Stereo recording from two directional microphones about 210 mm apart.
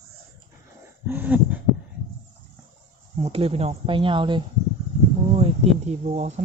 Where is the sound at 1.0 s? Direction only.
10° right (ahead or behind).